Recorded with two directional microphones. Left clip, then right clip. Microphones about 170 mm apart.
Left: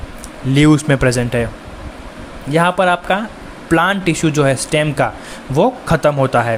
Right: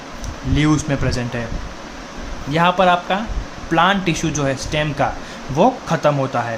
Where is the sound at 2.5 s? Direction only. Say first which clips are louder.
Left 1 dB; 35° left (ahead or behind).